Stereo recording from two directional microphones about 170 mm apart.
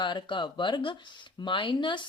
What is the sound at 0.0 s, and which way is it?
Speech, 30° left (ahead or behind).